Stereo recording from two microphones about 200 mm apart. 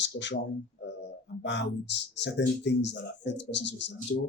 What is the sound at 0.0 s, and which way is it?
Speech, 60° left (ahead or behind).